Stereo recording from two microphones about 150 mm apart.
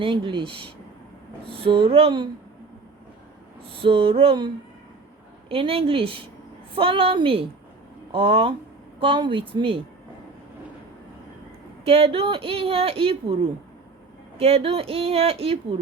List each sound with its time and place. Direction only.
0.0 s speech: 35° right (ahead or behind)
1.5 s speech: 40° right (ahead or behind)
3.8 s speech: 40° right (ahead or behind)
11.9 s speech: 40° right (ahead or behind)
14.3 s speech: 40° right (ahead or behind)